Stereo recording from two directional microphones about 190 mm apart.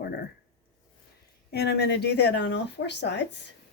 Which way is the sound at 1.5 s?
60° left (ahead or behind).